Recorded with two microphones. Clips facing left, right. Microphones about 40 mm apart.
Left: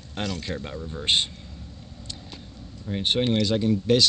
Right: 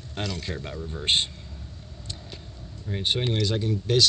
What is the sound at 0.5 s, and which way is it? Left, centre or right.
Speech, centre.